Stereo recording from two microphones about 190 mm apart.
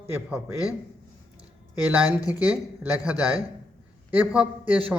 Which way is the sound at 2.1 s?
20° left (ahead or behind).